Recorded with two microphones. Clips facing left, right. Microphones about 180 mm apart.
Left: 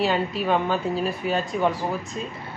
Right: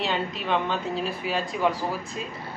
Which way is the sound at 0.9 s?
Centre (ahead or behind).